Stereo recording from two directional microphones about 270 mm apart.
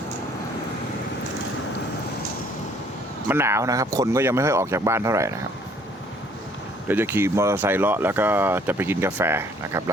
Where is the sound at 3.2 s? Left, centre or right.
Centre.